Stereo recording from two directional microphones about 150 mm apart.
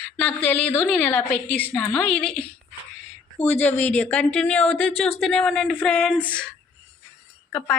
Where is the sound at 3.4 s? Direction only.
45° left (ahead or behind).